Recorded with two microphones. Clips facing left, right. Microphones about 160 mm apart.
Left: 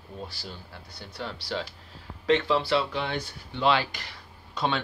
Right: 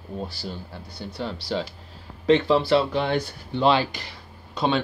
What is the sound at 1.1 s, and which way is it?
Speech, 25° right (ahead or behind).